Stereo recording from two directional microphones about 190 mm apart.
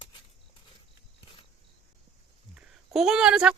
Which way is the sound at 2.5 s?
5° right (ahead or behind).